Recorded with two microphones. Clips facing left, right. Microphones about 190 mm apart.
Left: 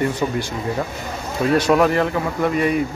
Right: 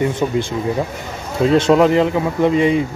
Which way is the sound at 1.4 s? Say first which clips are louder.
Right 4 dB; 25° right (ahead or behind).